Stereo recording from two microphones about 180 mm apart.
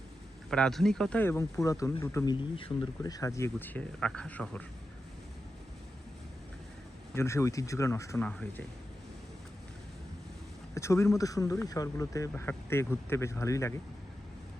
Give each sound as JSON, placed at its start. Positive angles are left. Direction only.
{"t": 0.5, "sound": "speech", "side_deg": 5}
{"t": 7.1, "sound": "speech", "side_deg": 15}
{"t": 10.8, "sound": "speech", "side_deg": 15}